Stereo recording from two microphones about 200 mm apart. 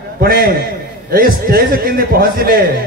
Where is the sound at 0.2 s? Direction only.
50° right (ahead or behind).